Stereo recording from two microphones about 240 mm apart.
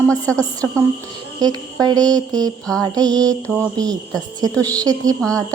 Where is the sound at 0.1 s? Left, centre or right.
Centre.